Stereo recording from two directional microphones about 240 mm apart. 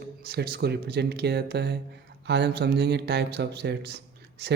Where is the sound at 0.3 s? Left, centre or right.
Right.